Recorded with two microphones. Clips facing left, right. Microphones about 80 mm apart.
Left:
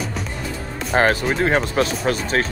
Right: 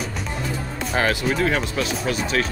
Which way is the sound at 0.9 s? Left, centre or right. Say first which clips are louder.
Left 4 dB; left.